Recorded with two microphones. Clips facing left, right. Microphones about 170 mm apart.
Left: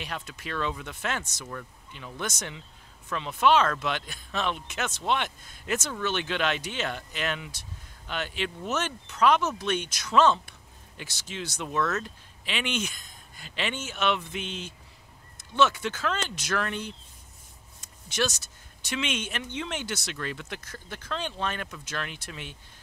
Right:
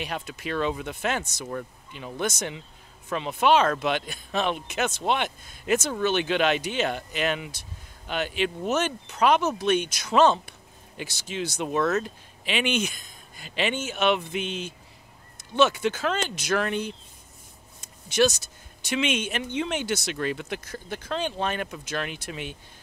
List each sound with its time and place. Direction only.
0.0 s speech: 15° right (ahead or behind)
1.4 s speech: 25° right (ahead or behind)
2.0 s speech: 15° right (ahead or behind)
18.9 s speech: 15° right (ahead or behind)